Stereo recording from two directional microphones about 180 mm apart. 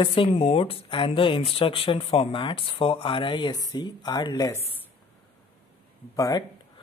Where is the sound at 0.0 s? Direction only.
30° left (ahead or behind).